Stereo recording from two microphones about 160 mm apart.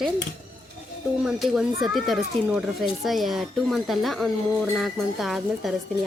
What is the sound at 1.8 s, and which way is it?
Speech, centre (ahead or behind).